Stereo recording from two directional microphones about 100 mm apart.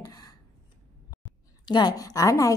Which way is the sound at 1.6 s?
45° left (ahead or behind).